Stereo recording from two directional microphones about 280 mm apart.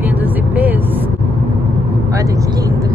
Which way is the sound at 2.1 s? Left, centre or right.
Centre.